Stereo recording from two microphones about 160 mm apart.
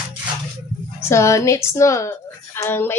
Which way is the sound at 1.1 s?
15° left (ahead or behind).